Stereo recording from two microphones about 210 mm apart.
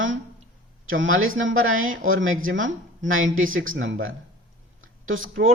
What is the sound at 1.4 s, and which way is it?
Speech, 70° right (ahead or behind).